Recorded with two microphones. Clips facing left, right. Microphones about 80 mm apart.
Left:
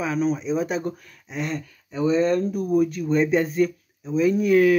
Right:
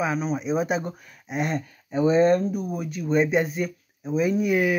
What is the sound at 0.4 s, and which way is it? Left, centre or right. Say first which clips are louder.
Speech: even; centre.